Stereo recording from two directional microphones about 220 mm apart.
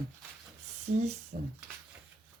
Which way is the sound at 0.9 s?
35° right (ahead or behind).